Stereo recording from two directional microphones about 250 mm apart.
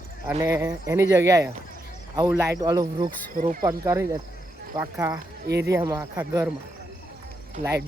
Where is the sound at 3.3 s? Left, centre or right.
Right.